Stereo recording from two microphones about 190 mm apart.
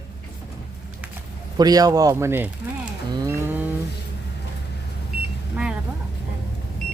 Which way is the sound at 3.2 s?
10° right (ahead or behind).